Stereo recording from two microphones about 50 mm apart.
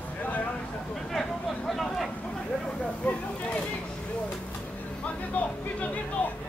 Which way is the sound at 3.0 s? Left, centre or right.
Left.